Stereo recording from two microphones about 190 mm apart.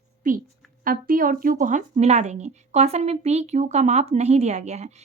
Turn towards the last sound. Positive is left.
turn(degrees=-35)  # may be behind; listen again after turning